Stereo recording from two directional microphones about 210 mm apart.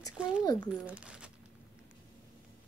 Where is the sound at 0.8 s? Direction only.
5° right (ahead or behind).